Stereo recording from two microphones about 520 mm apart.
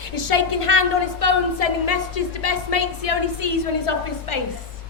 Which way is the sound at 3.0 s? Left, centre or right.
Left.